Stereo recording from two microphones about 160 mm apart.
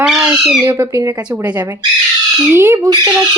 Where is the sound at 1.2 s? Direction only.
10° right (ahead or behind).